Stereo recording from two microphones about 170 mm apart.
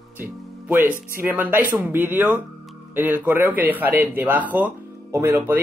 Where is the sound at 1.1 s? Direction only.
10° right (ahead or behind).